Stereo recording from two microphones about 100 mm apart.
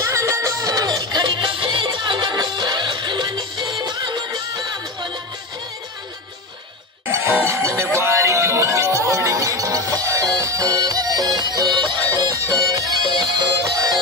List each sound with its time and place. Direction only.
0.0 s music: 30° right (ahead or behind)
7.1 s music: 25° right (ahead or behind)